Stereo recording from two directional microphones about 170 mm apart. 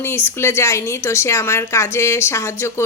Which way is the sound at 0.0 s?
15° left (ahead or behind).